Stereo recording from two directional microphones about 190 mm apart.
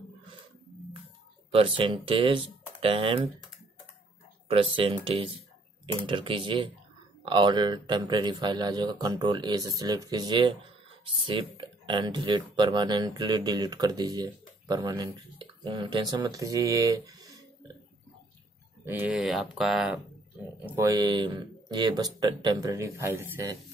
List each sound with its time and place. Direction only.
1.5 s speech: 30° right (ahead or behind)
4.5 s speech: 30° right (ahead or behind)
18.9 s speech: 10° right (ahead or behind)
20.6 s speech: 15° right (ahead or behind)